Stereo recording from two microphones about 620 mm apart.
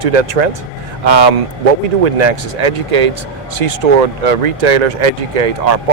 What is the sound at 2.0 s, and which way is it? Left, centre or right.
Speech, right.